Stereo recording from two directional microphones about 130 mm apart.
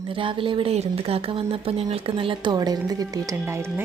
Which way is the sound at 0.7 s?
55° right (ahead or behind).